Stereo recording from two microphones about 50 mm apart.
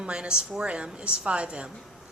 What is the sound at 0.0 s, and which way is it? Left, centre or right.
A woman's voice, centre.